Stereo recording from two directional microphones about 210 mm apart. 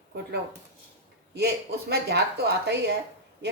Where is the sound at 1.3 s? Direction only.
50° right (ahead or behind).